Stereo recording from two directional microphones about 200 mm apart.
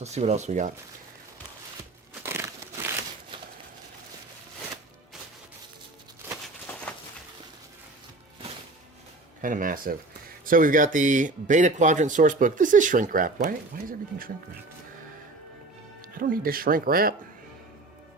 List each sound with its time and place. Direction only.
0.0 s speech: 35° right (ahead or behind)
2.2 s crunch: 10° right (ahead or behind)
6.9 s a sound: 5° left (ahead or behind)
9.4 s speech: 40° right (ahead or behind)
16.0 s speech: 45° right (ahead or behind)